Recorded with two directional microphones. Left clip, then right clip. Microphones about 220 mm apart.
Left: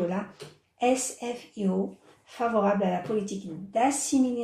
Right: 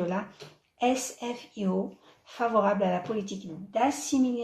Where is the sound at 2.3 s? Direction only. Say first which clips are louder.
Even; 30° right (ahead or behind).